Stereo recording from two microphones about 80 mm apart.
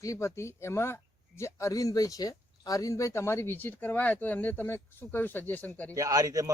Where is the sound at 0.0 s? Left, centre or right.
Left.